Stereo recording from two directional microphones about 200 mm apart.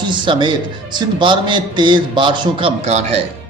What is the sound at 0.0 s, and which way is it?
A man's voice, 25° right (ahead or behind).